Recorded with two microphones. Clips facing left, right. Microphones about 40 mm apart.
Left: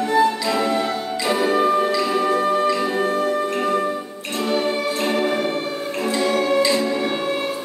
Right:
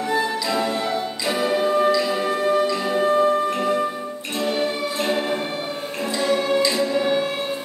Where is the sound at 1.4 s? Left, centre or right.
Left.